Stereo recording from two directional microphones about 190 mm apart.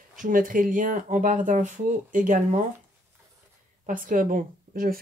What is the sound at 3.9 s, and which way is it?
Speech, 45° right (ahead or behind).